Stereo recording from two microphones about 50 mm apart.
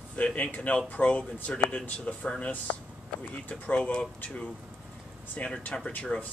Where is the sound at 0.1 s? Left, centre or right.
Left.